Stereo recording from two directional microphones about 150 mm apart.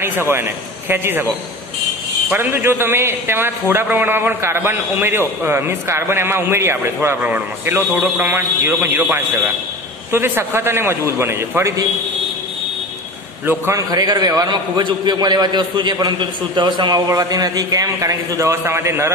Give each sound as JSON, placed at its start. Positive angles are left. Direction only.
{"t": 0.0, "sound": "a man's voice", "side_deg": -15}
{"t": 2.2, "sound": "a man's voice", "side_deg": -15}
{"t": 13.5, "sound": "a man's voice", "side_deg": -20}